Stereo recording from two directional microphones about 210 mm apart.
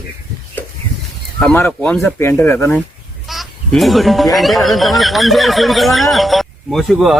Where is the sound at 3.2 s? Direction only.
Centre (ahead or behind).